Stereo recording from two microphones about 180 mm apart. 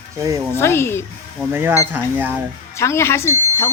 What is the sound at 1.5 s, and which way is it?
Speech, 10° right (ahead or behind).